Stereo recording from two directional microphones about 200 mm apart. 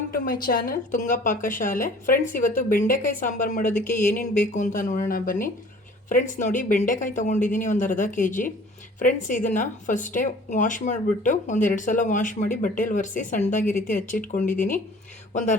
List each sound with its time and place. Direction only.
0.1 s a woman's voice: 45° left (ahead or behind)